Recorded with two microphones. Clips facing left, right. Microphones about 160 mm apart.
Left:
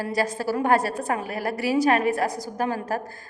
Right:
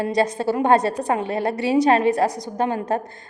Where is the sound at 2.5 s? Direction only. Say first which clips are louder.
Right 4 dB; 25° right (ahead or behind).